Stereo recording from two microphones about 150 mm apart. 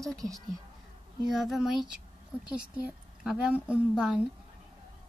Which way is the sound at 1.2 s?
Centre (ahead or behind).